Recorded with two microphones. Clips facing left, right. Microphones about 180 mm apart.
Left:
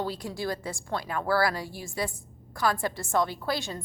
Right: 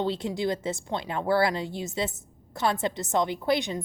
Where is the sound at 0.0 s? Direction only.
25° right (ahead or behind).